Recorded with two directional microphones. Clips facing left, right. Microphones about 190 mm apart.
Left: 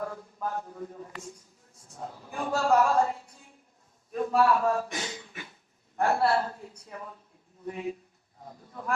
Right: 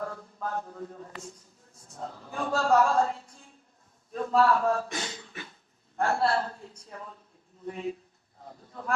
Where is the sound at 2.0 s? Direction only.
15° left (ahead or behind).